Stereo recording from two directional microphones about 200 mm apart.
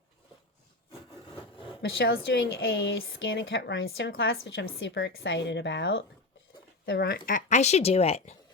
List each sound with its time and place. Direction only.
1.8 s speech: 50° left (ahead or behind)
2.6 s a woman's voice: 65° left (ahead or behind)
4.1 s a woman's voice: 75° left (ahead or behind); by 7.2 s 50° left (ahead or behind)
7.3 s speech: 40° left (ahead or behind)